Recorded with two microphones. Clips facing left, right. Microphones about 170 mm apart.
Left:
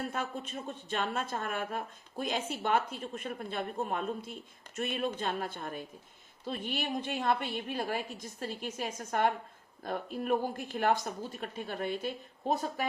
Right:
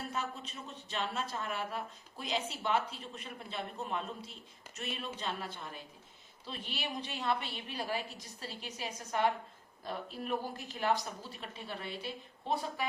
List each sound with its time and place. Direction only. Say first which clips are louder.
0.1 s speech: left 3 dB; 50° left (ahead or behind)